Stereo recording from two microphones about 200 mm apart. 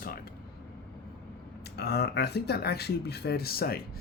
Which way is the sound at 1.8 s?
55° left (ahead or behind).